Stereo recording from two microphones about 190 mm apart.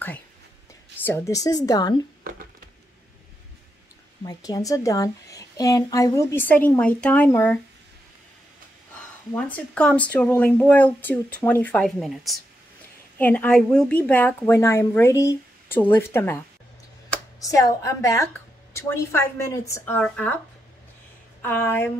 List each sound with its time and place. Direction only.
1.0 s a woman's voice: 15° left (ahead or behind)
4.3 s a woman's voice: 20° left (ahead or behind)
9.3 s a woman's voice: 5° left (ahead or behind)
17.4 s a woman's voice: 15° left (ahead or behind)
21.4 s a woman's voice: 10° left (ahead or behind)